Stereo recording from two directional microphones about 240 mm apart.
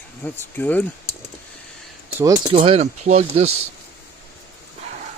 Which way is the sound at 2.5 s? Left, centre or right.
Right.